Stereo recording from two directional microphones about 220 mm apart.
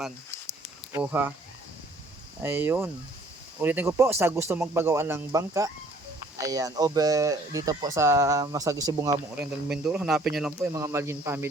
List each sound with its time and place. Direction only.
0.9 s speech: 10° right (ahead or behind)
2.4 s speech: 10° right (ahead or behind)
9.6 s speech: 5° right (ahead or behind)